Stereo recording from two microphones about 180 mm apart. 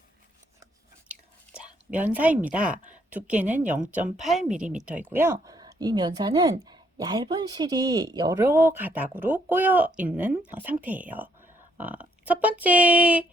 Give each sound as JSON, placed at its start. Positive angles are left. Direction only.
{"t": 1.5, "sound": "a woman's voice", "side_deg": -5}
{"t": 5.1, "sound": "speech", "side_deg": -15}